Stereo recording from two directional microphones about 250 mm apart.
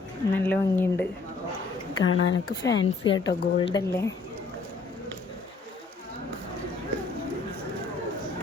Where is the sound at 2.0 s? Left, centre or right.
Left.